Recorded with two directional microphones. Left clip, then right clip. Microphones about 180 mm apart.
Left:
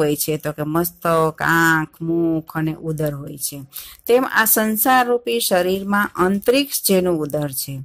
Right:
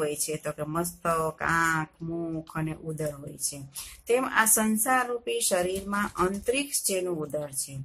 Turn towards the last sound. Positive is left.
turn(degrees=40)  # may be behind; listen again after turning